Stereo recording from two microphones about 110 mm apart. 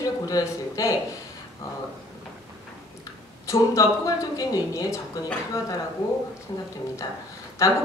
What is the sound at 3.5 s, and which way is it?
A woman's voice, 30° left (ahead or behind).